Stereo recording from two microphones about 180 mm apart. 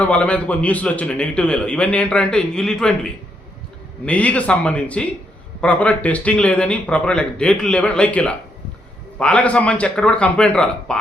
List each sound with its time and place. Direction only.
0.0 s a man's voice: 5° left (ahead or behind)